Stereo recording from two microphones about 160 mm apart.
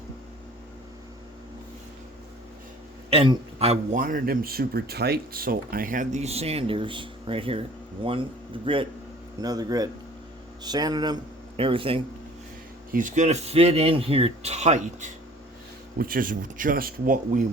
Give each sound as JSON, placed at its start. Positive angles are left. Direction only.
{"t": 3.1, "sound": "a man's voice", "side_deg": -35}
{"t": 3.9, "sound": "speech", "side_deg": -60}
{"t": 12.9, "sound": "speech", "side_deg": -55}
{"t": 16.0, "sound": "speech", "side_deg": -60}